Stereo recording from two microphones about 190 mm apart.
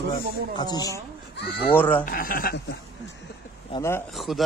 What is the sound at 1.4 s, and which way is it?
Speech, 60° left (ahead or behind).